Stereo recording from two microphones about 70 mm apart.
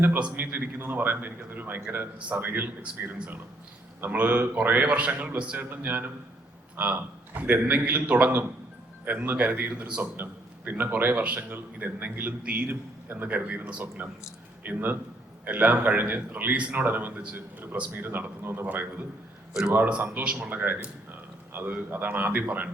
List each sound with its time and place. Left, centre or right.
0.3 s a man's voice: right
20.2 s a man's voice: centre